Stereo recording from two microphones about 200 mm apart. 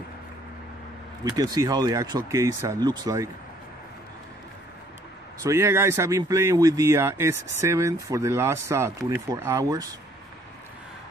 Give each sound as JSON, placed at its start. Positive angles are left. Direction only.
{"t": 1.3, "sound": "speech", "side_deg": -20}
{"t": 5.4, "sound": "speech", "side_deg": -15}